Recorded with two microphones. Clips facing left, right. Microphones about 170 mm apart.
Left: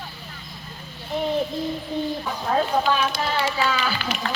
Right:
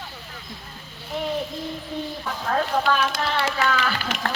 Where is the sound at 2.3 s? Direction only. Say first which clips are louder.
Even; 15° left (ahead or behind).